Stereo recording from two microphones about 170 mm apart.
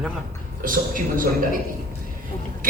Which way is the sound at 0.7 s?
55° right (ahead or behind).